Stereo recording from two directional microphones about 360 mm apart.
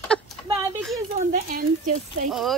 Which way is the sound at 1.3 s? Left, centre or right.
Right.